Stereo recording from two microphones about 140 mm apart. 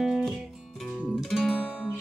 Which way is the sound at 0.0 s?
Centre (ahead or behind).